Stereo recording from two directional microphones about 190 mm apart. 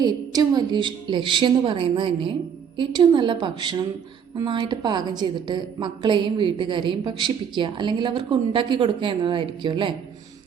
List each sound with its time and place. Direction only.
0.0 s a woman's voice: 20° right (ahead or behind)